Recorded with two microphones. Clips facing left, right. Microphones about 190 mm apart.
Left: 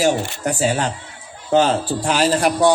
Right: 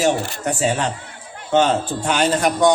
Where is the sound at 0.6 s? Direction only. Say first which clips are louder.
Left 1 dB; 35° left (ahead or behind).